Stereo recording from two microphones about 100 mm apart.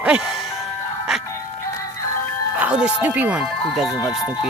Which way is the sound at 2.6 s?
10° right (ahead or behind).